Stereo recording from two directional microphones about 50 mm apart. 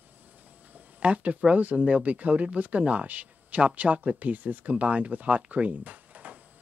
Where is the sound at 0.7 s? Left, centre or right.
Right.